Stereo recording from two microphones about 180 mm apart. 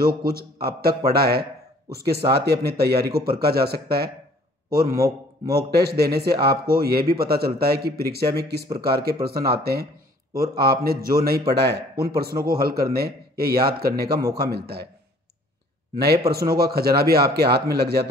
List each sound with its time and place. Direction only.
0.0 s a man's voice: 55° right (ahead or behind)
16.4 s speech: 60° right (ahead or behind)